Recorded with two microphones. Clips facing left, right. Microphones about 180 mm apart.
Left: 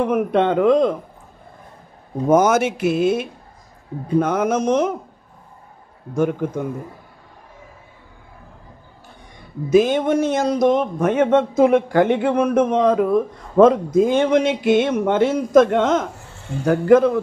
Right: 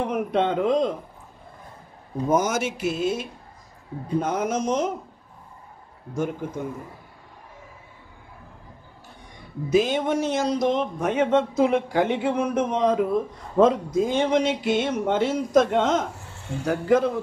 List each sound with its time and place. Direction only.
0.0 s speech: 55° left (ahead or behind)
2.2 s speech: 60° left (ahead or behind)
6.1 s speech: 60° left (ahead or behind)
9.7 s speech: 50° left (ahead or behind)